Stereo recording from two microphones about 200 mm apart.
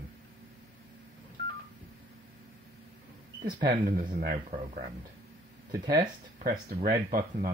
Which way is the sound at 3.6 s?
50° right (ahead or behind).